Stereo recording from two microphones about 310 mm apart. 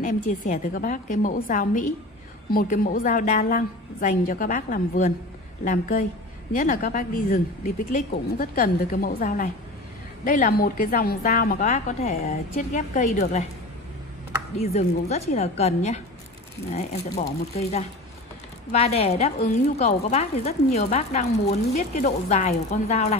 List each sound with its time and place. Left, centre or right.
0.0 s speech: left
14.6 s speech: centre